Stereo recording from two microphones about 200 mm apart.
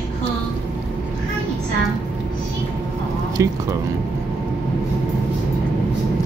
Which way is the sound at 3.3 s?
15° right (ahead or behind).